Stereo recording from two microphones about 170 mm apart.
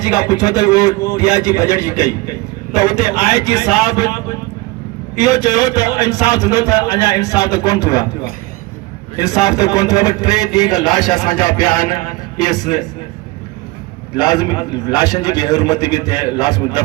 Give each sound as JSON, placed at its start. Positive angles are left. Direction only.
{"t": 0.0, "sound": "a man's voice", "side_deg": 20}
{"t": 5.3, "sound": "a man's voice", "side_deg": 20}
{"t": 9.2, "sound": "a man's voice", "side_deg": 20}
{"t": 14.2, "sound": "a man's voice", "side_deg": 25}